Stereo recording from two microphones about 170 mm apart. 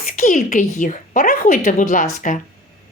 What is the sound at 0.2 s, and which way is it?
Speech, 50° left (ahead or behind).